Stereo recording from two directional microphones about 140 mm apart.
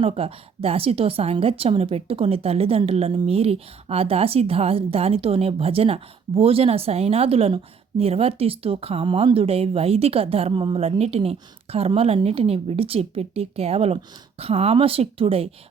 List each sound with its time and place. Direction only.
0.0 s a woman's voice: 45° right (ahead or behind)